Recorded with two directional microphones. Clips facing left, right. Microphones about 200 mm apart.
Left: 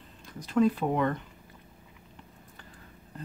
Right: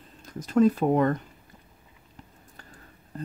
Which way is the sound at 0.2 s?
45° right (ahead or behind).